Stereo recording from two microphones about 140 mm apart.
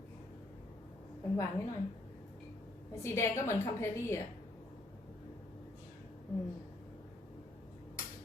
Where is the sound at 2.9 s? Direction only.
20° left (ahead or behind).